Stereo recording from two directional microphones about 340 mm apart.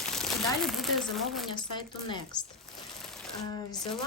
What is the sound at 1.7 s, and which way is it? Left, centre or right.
Speech, centre.